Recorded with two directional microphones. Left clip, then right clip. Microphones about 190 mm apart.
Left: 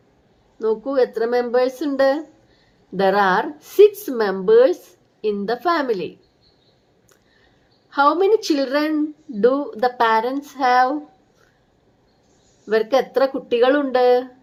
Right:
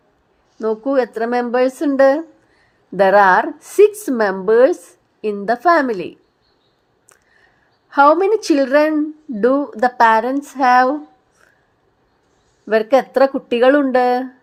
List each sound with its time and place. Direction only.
0.6 s a woman's voice: 40° right (ahead or behind)
7.9 s a woman's voice: 40° right (ahead or behind)
12.6 s a woman's voice: 35° right (ahead or behind)